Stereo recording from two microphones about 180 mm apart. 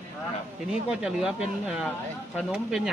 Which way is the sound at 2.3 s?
5° right (ahead or behind).